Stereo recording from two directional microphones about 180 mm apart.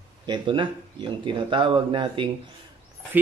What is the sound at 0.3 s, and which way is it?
Speech, 30° right (ahead or behind).